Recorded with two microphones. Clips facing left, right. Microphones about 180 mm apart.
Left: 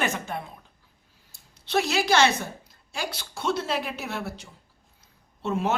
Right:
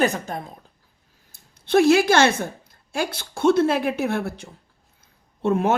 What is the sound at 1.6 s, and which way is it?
A woman's voice, 55° right (ahead or behind).